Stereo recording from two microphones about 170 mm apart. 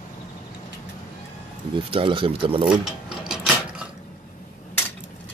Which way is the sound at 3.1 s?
5° right (ahead or behind).